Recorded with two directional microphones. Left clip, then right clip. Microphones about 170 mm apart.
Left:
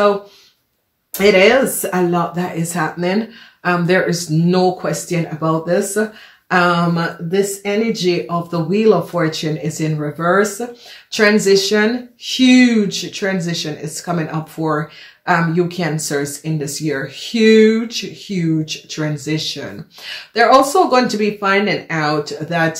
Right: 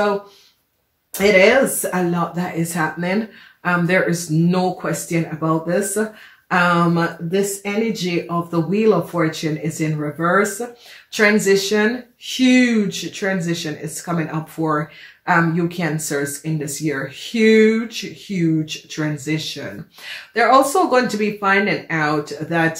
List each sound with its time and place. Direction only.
1.1 s speech: 45° left (ahead or behind)